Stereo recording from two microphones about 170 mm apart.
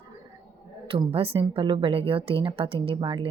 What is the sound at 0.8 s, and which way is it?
A woman's voice, 35° right (ahead or behind).